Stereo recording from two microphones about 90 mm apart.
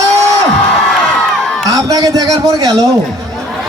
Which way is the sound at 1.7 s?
40° right (ahead or behind).